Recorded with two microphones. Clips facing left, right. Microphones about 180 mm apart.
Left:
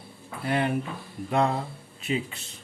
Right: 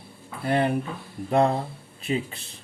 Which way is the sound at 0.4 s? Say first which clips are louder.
Right 3 dB; 35° right (ahead or behind).